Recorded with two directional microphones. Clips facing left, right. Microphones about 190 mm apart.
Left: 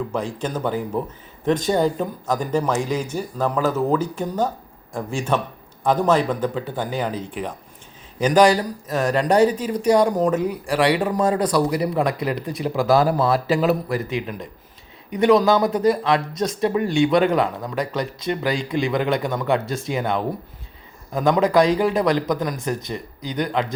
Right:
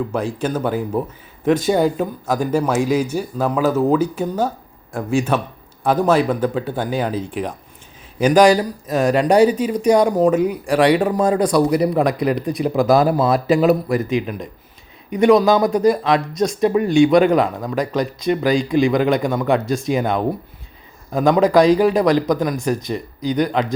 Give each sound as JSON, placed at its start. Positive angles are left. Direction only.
{"t": 0.1, "sound": "speech", "side_deg": -10}
{"t": 15.2, "sound": "a man's voice", "side_deg": -15}